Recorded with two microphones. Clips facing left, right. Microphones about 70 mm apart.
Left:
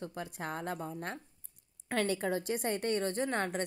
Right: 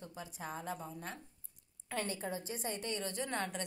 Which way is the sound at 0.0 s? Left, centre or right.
Left.